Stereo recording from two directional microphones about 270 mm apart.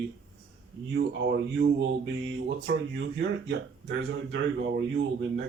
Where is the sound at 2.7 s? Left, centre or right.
Right.